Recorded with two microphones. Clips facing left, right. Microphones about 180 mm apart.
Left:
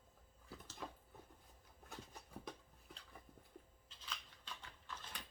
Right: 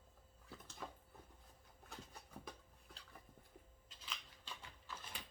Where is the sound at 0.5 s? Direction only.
Centre (ahead or behind).